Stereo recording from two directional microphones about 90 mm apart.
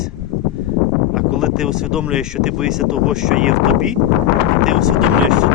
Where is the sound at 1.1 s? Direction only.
5° right (ahead or behind).